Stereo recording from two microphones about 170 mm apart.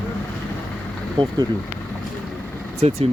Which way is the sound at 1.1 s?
25° right (ahead or behind).